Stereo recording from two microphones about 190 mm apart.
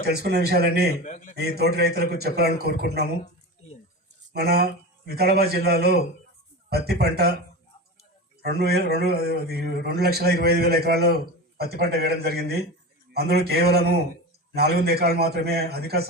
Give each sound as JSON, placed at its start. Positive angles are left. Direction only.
{"t": 0.0, "sound": "a man's voice", "side_deg": -55}
{"t": 1.0, "sound": "a man's voice", "side_deg": 40}
{"t": 1.4, "sound": "a man's voice", "side_deg": -60}
{"t": 4.3, "sound": "a man's voice", "side_deg": -55}
{"t": 8.4, "sound": "a man's voice", "side_deg": -55}